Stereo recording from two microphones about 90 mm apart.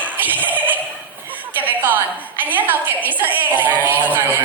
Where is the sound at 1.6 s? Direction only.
20° right (ahead or behind).